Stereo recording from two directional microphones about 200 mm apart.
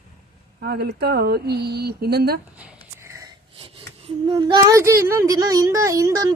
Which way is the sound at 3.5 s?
25° right (ahead or behind).